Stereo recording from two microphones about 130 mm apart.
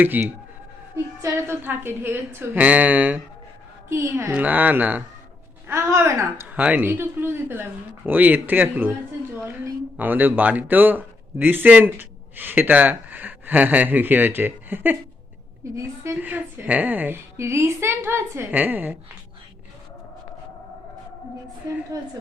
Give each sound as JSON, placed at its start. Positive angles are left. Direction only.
{"t": 0.0, "sound": "a man's voice", "side_deg": -15}
{"t": 10.0, "sound": "a man's voice", "side_deg": -15}
{"t": 16.1, "sound": "a man's voice", "side_deg": -10}
{"t": 21.9, "sound": "a woman's voice", "side_deg": -30}